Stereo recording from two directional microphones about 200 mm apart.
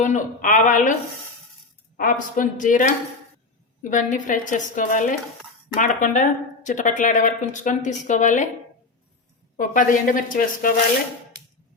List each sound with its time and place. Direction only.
0.0 s speech: 40° left (ahead or behind)
2.0 s speech: 40° left (ahead or behind)
9.6 s speech: 40° left (ahead or behind)